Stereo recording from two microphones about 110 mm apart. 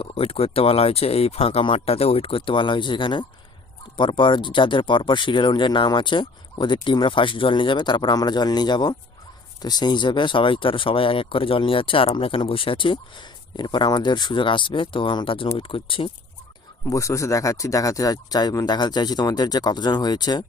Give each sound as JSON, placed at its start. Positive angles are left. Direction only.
{"t": 0.0, "sound": "speech", "side_deg": 60}
{"t": 16.9, "sound": "speech", "side_deg": 30}